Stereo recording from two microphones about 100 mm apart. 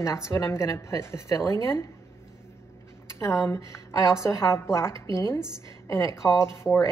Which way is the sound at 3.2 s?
30° left (ahead or behind).